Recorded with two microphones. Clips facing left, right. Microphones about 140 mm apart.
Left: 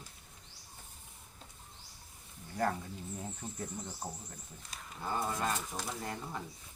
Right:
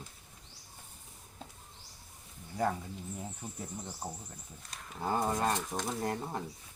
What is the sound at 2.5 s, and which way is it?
Speech, 10° right (ahead or behind).